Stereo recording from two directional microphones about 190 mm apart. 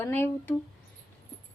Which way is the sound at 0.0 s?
10° left (ahead or behind).